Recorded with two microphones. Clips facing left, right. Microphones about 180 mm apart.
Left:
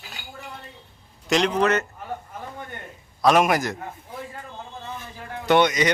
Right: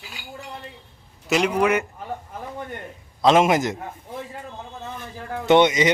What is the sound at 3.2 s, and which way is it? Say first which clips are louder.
Speech: right 2 dB; 20° right (ahead or behind).